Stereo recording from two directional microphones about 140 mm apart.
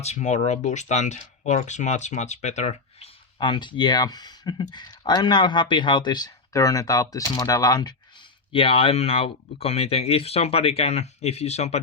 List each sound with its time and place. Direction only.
0.0 s speech: 55° left (ahead or behind); by 7.9 s 30° left (ahead or behind)
8.5 s speech: 40° left (ahead or behind)